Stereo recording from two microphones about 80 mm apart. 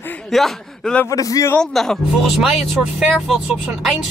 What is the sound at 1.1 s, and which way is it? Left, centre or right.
Speech, left.